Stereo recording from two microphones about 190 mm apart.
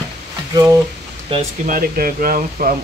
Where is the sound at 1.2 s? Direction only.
30° right (ahead or behind).